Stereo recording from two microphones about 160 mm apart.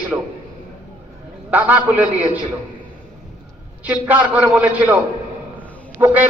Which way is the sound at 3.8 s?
10° right (ahead or behind).